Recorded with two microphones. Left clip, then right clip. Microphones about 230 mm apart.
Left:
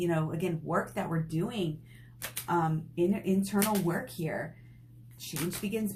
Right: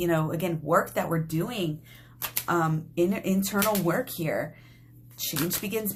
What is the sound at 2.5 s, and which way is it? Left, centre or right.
Speech, right.